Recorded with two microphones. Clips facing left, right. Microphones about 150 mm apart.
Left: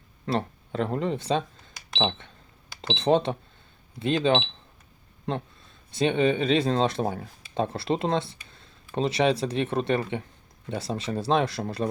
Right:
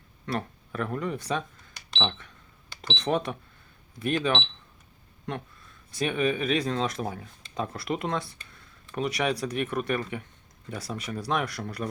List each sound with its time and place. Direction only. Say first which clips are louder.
0.3 s speech: left 4 dB; 25° left (ahead or behind)
8.4 s a sound: left 1 dB; 25° left (ahead or behind)
9.0 s speech: left 4 dB; 25° left (ahead or behind)